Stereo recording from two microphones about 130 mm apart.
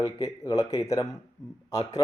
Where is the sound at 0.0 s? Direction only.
25° left (ahead or behind).